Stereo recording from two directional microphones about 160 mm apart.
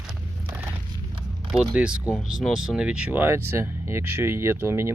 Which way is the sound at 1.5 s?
5° right (ahead or behind).